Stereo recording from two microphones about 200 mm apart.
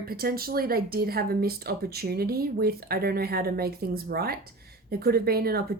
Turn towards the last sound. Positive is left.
turn(degrees=-50)  # may be behind; listen again after turning